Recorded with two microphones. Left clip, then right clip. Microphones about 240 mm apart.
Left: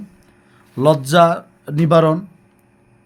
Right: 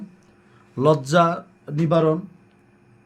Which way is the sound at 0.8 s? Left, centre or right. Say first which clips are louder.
Left 5 dB; left.